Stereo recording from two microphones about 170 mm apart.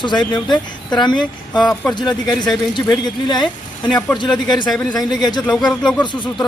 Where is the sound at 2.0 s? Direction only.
25° left (ahead or behind).